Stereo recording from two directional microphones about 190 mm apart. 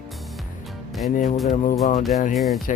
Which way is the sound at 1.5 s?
40° left (ahead or behind).